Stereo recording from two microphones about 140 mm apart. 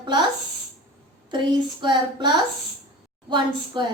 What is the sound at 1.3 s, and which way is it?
Speech, 35° right (ahead or behind).